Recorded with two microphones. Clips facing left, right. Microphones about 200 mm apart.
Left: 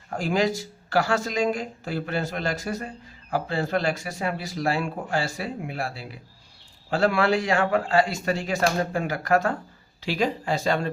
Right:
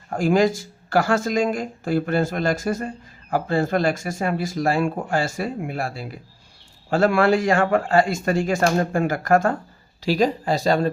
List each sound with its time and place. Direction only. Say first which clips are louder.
0.2 s speech: right 6 dB; 50° right (ahead or behind)